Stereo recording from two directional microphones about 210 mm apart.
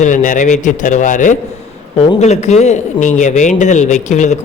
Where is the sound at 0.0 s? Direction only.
35° left (ahead or behind).